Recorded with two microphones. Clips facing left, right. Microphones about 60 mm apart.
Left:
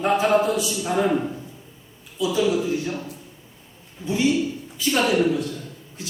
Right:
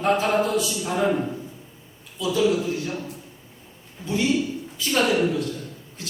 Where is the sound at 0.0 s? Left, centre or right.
Centre.